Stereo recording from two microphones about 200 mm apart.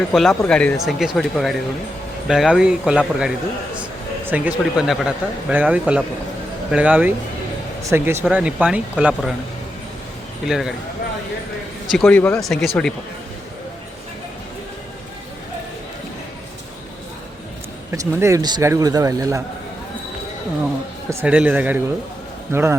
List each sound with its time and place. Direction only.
0.1 s speech: centre (ahead or behind)
10.4 s speech: centre (ahead or behind)
11.9 s speech: 5° left (ahead or behind)
17.9 s speech: 15° right (ahead or behind)
21.1 s speech: 10° right (ahead or behind)